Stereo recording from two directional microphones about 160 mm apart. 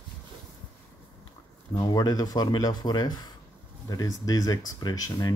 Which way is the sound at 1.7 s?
25° left (ahead or behind).